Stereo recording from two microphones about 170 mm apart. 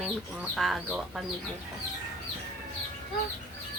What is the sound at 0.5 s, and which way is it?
Speech, centre (ahead or behind).